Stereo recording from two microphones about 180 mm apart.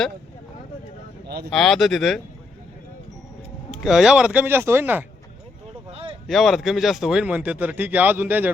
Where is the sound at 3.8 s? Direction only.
5° right (ahead or behind).